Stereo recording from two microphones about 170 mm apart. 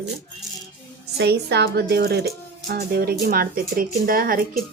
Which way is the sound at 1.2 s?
75° right (ahead or behind).